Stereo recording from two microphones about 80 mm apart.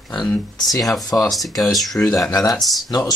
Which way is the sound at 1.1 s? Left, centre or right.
Left.